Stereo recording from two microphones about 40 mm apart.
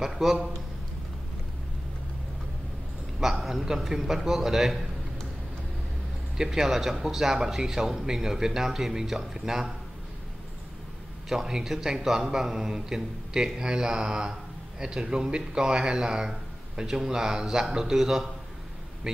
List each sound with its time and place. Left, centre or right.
0.0 s speech: centre
3.2 s a man's voice: centre
6.3 s speech: centre
11.2 s speech: centre